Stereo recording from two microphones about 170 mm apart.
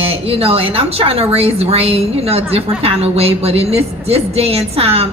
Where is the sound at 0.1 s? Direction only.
35° right (ahead or behind).